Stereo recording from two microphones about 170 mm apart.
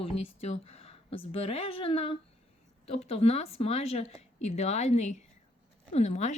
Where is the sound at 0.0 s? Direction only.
35° left (ahead or behind).